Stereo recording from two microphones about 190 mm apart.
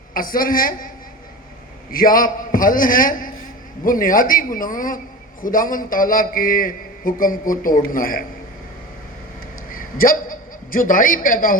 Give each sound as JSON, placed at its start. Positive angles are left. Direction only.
{"t": 0.1, "sound": "a man's voice", "side_deg": 50}
{"t": 1.9, "sound": "a man's voice", "side_deg": 50}
{"t": 9.6, "sound": "a sound", "side_deg": 50}